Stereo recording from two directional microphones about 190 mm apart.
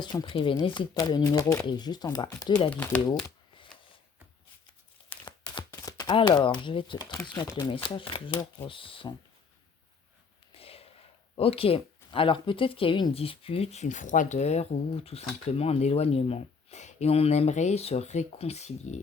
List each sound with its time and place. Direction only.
0.0 s speech: 25° left (ahead or behind)
2.6 s speech: 10° left (ahead or behind)
5.2 s a sound: 25° left (ahead or behind)
7.3 s speech: 20° left (ahead or behind)
10.5 s a sound: 30° left (ahead or behind)
11.3 s speech: 30° left (ahead or behind)